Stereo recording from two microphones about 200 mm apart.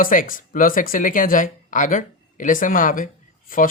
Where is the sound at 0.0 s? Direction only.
45° left (ahead or behind).